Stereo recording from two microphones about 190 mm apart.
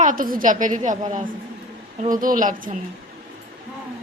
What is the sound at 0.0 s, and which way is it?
A woman's voice, 45° right (ahead or behind).